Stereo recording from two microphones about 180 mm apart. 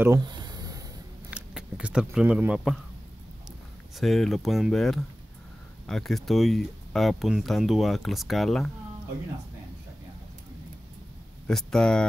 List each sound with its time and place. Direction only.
0.0 s a sound: 20° right (ahead or behind)
1.3 s keys jangling: 5° right (ahead or behind)
4.0 s speech: centre (ahead or behind)
11.4 s speech: 5° left (ahead or behind)